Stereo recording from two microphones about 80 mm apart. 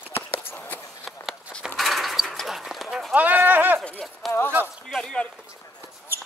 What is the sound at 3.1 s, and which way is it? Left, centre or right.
Sheep, centre.